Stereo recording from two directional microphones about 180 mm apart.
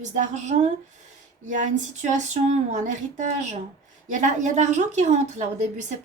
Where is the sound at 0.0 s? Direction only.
40° right (ahead or behind).